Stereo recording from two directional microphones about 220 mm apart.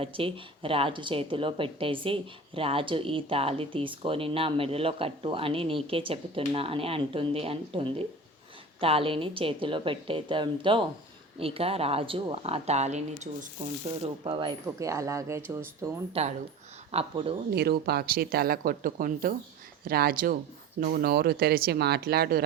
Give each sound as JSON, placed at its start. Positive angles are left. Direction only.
{"t": 0.0, "sound": "speech", "side_deg": -25}
{"t": 14.0, "sound": "speech", "side_deg": -25}
{"t": 16.2, "sound": "speech", "side_deg": -25}
{"t": 17.5, "sound": "speech", "side_deg": -45}